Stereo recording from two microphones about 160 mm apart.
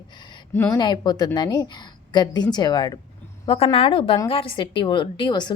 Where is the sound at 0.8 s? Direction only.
25° left (ahead or behind).